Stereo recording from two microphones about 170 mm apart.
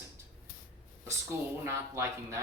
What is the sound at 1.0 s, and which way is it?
Speech, 15° right (ahead or behind).